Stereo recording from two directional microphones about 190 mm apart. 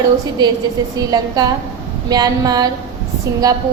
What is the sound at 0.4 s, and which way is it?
A woman's voice, 20° right (ahead or behind).